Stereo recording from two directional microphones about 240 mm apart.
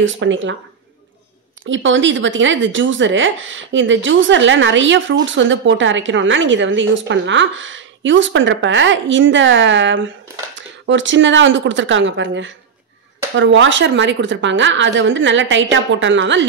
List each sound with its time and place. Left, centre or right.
0.0 s speech: right
1.7 s speech: right